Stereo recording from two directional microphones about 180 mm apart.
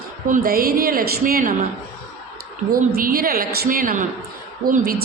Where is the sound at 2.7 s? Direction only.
50° right (ahead or behind).